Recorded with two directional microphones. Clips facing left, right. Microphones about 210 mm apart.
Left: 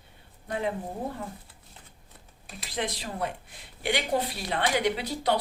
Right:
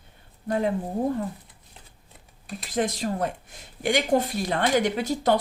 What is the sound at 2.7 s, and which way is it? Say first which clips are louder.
Speech: right 7 dB; 45° right (ahead or behind).